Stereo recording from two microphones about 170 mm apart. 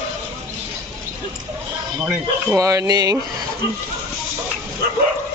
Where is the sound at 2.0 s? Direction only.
15° right (ahead or behind).